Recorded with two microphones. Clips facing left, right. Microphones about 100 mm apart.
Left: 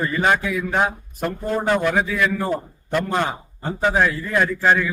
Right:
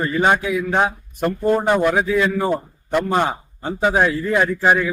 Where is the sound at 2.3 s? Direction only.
5° right (ahead or behind).